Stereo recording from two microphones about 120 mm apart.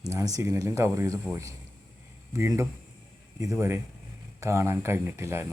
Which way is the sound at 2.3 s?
25° right (ahead or behind).